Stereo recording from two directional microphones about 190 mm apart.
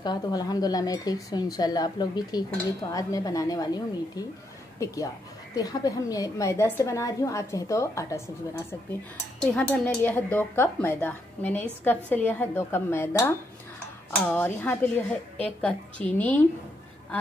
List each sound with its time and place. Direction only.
0.0 s speech: 20° left (ahead or behind)
9.5 s speech: 10° left (ahead or behind)